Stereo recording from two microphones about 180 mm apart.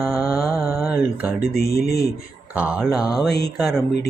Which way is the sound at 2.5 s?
10° right (ahead or behind).